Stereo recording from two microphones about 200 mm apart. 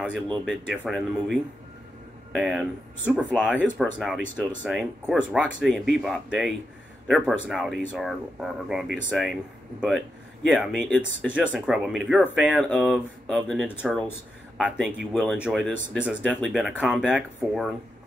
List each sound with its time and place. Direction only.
0.3 s speech: centre (ahead or behind)
15.1 s speech: 5° left (ahead or behind)